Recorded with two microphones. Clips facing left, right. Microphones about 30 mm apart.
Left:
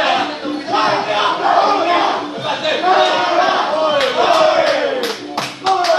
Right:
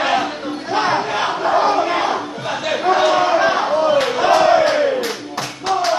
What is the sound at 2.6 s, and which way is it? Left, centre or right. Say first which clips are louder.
Crowd: left 2 dB; left.